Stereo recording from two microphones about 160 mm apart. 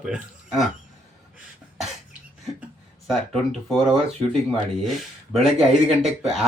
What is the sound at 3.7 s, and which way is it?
A man's voice, centre (ahead or behind).